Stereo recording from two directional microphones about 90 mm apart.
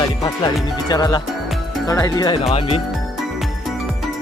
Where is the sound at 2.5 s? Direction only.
90° left.